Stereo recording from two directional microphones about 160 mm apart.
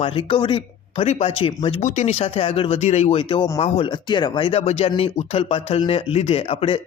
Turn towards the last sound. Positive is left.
turn(degrees=35)  # may be behind; listen again after turning